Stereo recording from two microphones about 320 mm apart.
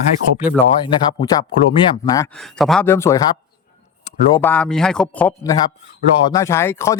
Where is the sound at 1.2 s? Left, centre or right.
Centre.